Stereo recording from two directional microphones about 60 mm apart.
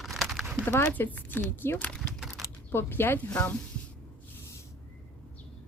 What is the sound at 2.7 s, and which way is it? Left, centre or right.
Speech, left.